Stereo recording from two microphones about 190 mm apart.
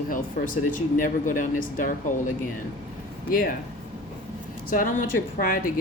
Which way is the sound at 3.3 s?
50° left (ahead or behind).